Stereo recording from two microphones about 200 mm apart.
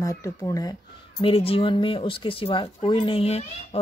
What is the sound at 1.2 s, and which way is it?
Speech, 30° left (ahead or behind).